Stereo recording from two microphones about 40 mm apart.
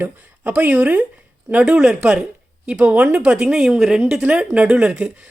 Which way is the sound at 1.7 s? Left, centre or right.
Right.